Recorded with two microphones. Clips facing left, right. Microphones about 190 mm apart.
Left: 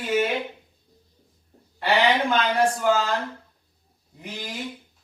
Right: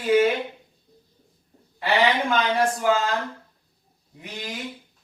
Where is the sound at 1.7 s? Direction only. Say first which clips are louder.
Even; centre (ahead or behind).